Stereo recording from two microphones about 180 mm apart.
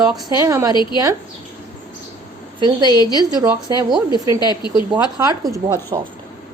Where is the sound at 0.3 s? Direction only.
15° right (ahead or behind).